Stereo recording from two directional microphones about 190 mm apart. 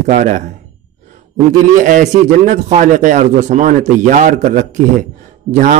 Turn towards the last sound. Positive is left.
turn(degrees=-40)  # may be behind; listen again after turning